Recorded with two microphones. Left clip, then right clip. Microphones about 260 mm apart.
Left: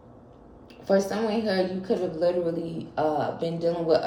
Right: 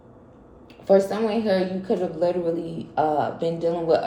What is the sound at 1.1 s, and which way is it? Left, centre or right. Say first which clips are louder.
Speech: right 4 dB; right.